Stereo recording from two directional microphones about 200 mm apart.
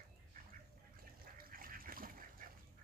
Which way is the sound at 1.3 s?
45° right (ahead or behind).